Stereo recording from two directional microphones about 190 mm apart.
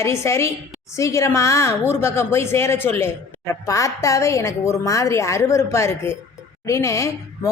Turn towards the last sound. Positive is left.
turn(degrees=15)  # may be behind; listen again after turning